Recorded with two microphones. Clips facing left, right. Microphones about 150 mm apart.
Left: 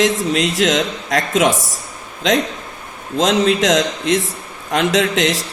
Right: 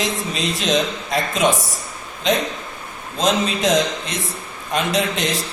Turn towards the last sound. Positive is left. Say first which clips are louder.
# left 5 dB
turn(degrees=90)